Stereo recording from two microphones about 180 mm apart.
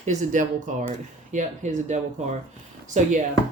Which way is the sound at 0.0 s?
40° right (ahead or behind).